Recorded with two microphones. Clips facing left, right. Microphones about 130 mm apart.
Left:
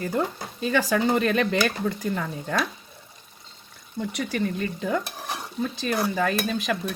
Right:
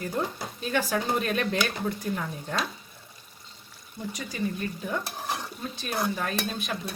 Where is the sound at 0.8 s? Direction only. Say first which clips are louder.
Left 5 dB; 90° left.